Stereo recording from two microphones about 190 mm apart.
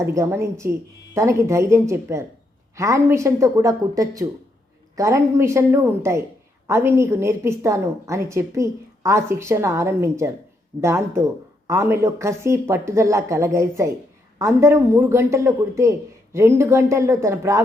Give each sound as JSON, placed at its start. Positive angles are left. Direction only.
{"t": 0.0, "sound": "a woman's voice", "side_deg": -15}